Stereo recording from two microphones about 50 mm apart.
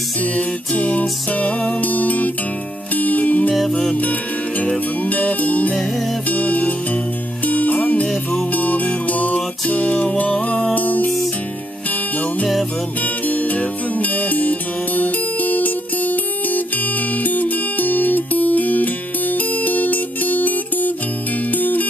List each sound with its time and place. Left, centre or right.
0.2 s music: left
13.0 s music: left